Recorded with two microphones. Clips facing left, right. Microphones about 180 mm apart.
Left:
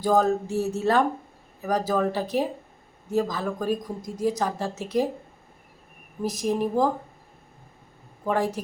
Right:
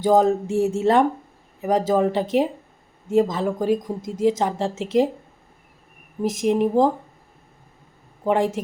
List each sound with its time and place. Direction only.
0.0 s a woman's voice: 20° right (ahead or behind)
6.2 s a woman's voice: 25° right (ahead or behind)
8.2 s a woman's voice: 20° right (ahead or behind)